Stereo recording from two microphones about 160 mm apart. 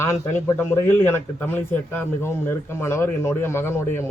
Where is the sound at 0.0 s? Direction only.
15° left (ahead or behind).